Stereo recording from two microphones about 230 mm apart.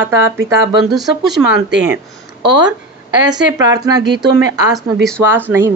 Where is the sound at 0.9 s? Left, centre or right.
Centre.